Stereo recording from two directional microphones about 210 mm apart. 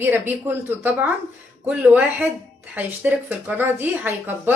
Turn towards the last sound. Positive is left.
turn(degrees=-10)  # may be behind; listen again after turning